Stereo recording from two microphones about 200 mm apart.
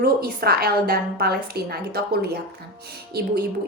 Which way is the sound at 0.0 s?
50° right (ahead or behind).